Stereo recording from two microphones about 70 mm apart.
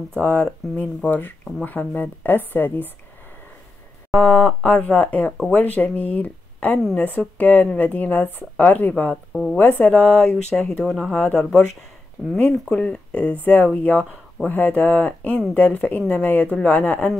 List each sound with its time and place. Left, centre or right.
0.2 s speech: left
4.1 s speech: centre
4.7 s speech: left
9.3 s speech: centre
9.6 s speech: left
9.8 s speech: centre
12.3 s speech: centre
12.6 s speech: centre